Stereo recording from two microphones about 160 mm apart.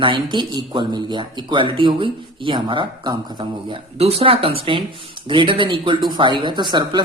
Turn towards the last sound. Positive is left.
turn(degrees=-30)  # may be behind; listen again after turning